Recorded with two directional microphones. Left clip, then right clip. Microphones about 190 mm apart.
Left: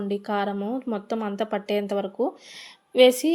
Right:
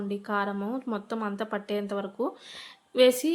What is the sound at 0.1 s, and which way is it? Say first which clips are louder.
A woman's voice: left 3 dB; 20° left (ahead or behind).